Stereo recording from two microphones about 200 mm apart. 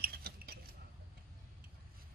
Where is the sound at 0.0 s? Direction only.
50° right (ahead or behind).